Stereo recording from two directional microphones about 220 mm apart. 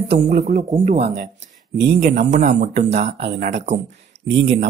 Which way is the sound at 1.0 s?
50° right (ahead or behind).